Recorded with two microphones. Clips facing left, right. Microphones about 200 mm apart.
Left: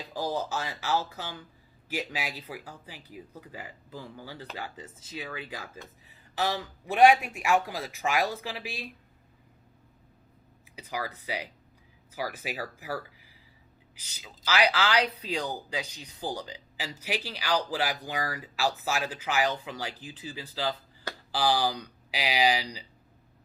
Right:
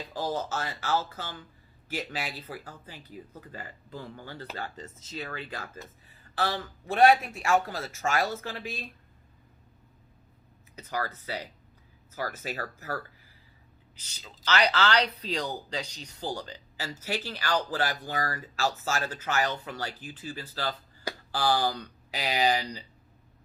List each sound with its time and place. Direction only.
0.1 s speech: 10° left (ahead or behind)
10.8 s speech: 10° left (ahead or behind)